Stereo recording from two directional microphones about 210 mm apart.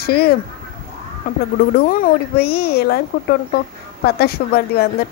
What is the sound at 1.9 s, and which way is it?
Speech, 40° left (ahead or behind).